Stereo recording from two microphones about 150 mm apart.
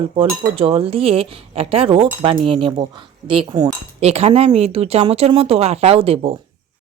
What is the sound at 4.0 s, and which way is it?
Speech, 45° right (ahead or behind).